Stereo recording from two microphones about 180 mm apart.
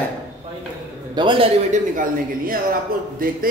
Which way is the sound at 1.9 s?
50° right (ahead or behind).